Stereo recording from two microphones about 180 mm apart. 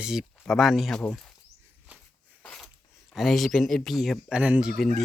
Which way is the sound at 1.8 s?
5° right (ahead or behind).